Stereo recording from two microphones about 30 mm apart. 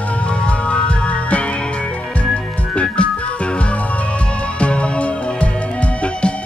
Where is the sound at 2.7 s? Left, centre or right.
Left.